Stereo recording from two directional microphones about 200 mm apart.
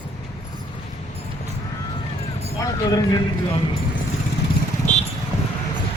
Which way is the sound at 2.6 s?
20° left (ahead or behind).